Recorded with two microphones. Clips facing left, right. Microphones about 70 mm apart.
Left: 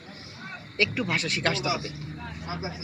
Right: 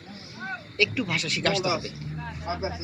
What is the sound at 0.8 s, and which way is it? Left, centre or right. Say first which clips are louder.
Speech: even; left.